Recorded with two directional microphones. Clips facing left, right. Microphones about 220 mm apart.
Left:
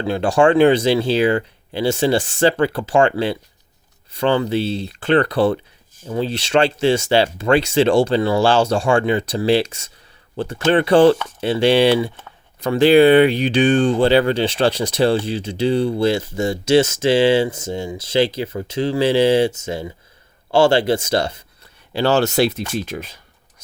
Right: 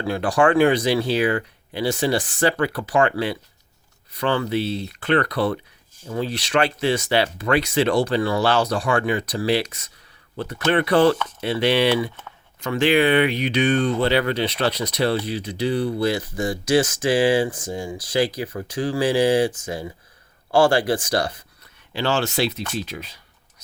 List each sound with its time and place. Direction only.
0.0 s speech: 25° left (ahead or behind); by 23.2 s 50° left (ahead or behind)